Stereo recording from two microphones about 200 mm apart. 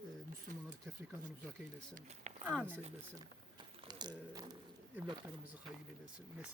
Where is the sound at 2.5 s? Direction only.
10° right (ahead or behind).